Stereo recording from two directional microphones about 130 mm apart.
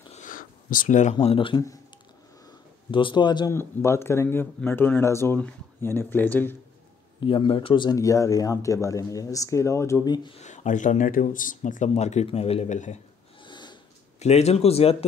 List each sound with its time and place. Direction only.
0.1 s a sound: 85° left
1.2 s speech: 45° left (ahead or behind)
2.9 s a man's voice: 40° left (ahead or behind)
3.5 s speech: 20° left (ahead or behind)
7.2 s speech: 40° left (ahead or behind)
10.3 s speech: 65° left (ahead or behind)
11.9 s speech: 60° left (ahead or behind)
13.4 s a sound: 35° left (ahead or behind)
14.2 s speech: 55° left (ahead or behind)